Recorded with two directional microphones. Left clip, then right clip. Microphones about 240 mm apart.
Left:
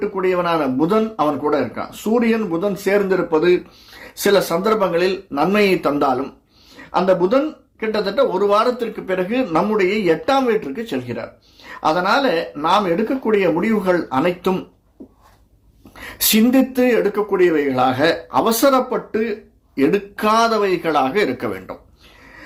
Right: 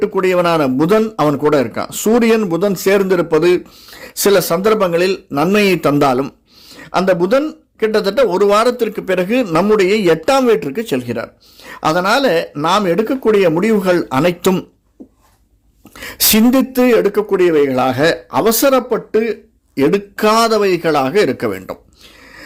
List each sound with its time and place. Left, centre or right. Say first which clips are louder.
0.2 s a man's voice: right 4 dB; right
16.0 s speech: right 4 dB; right